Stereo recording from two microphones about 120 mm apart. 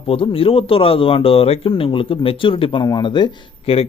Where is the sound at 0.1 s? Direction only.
50° left (ahead or behind).